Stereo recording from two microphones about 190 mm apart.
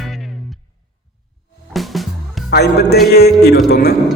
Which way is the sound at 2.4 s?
60° left (ahead or behind).